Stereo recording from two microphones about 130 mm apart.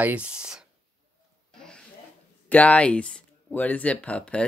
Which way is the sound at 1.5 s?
5° left (ahead or behind).